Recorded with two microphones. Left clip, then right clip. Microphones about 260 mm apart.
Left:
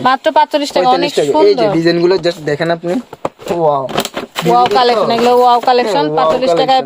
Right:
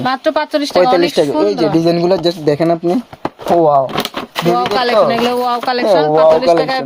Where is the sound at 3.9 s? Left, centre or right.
Centre.